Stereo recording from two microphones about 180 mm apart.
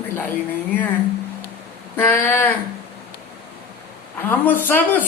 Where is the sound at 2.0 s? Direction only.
10° left (ahead or behind).